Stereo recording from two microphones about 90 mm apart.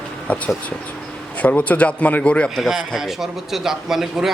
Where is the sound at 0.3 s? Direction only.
15° left (ahead or behind).